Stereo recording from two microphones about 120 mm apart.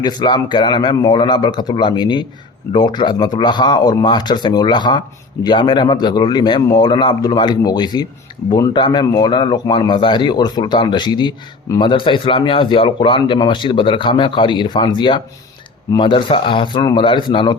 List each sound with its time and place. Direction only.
0.0 s speech: 35° left (ahead or behind)
8.7 s speech: 40° left (ahead or behind)